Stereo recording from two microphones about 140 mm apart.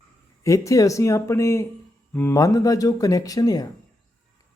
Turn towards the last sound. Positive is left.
turn(degrees=25)  # may be behind; listen again after turning